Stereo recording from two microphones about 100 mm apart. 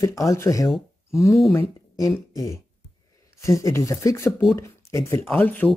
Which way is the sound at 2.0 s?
30° left (ahead or behind).